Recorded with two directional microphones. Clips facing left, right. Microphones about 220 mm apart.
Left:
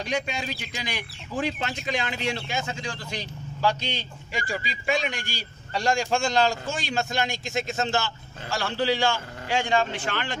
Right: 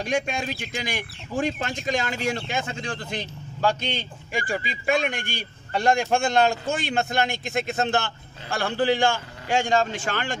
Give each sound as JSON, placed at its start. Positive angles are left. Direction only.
{"t": 0.0, "sound": "speech", "side_deg": -50}